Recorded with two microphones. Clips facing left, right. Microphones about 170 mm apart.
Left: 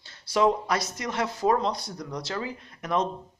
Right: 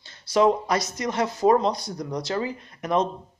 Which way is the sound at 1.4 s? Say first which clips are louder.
Right 5 dB; 10° right (ahead or behind).